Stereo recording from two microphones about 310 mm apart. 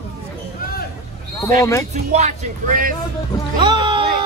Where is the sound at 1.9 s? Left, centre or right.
Right.